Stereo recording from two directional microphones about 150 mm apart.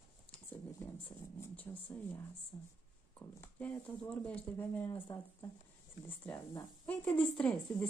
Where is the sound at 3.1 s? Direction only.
10° left (ahead or behind).